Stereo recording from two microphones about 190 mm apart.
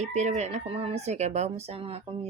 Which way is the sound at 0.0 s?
35° right (ahead or behind).